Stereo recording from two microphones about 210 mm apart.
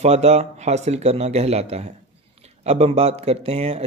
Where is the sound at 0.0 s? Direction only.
30° right (ahead or behind).